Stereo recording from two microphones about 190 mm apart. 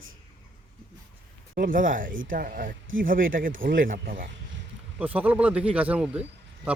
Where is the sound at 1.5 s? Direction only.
45° right (ahead or behind).